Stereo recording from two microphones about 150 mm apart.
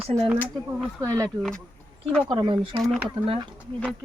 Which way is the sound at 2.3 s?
35° right (ahead or behind).